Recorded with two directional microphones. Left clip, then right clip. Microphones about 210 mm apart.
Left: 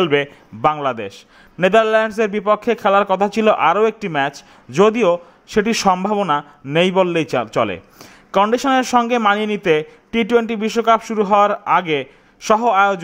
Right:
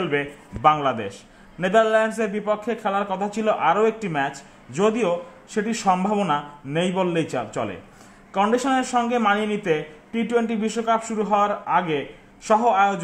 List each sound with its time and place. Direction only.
0.0 s a man's voice: 40° left (ahead or behind)